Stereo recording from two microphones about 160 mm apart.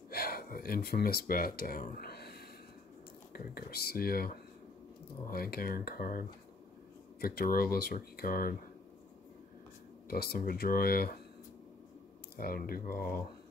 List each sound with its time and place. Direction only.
0.1 s speech: 70° left (ahead or behind)
3.3 s speech: 70° left (ahead or behind)
5.3 s speech: 70° left (ahead or behind)
10.0 s speech: 75° left (ahead or behind)
12.4 s speech: 65° left (ahead or behind)